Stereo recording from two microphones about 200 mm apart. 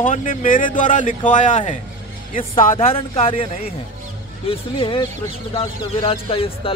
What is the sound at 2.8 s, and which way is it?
Speech, 30° left (ahead or behind).